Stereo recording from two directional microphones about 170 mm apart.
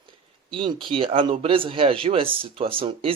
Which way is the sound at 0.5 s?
30° right (ahead or behind).